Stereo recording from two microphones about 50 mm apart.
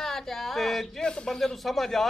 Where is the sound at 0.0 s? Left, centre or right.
Centre.